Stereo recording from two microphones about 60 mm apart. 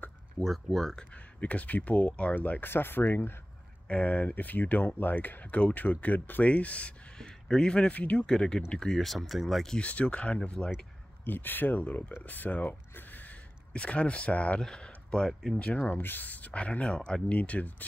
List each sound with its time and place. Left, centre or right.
0.4 s speech: centre
1.1 s speech: left
3.8 s speech: left
7.2 s speech: centre
9.8 s speech: left
11.2 s speech: left
14.6 s speech: centre
15.6 s speech: left